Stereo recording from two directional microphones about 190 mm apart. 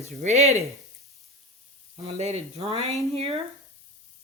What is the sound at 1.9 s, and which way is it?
Speech, 35° right (ahead or behind).